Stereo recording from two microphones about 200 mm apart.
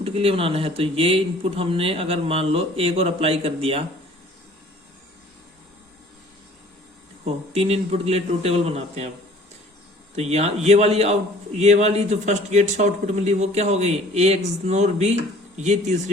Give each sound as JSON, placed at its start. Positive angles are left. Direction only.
{"t": 0.0, "sound": "a man's voice", "side_deg": -30}
{"t": 7.3, "sound": "a man's voice", "side_deg": -30}
{"t": 10.2, "sound": "a man's voice", "side_deg": -30}